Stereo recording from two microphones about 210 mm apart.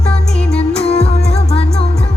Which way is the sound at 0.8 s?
30° left (ahead or behind).